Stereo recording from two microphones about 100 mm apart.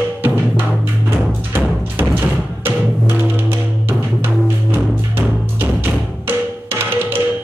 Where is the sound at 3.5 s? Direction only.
20° right (ahead or behind).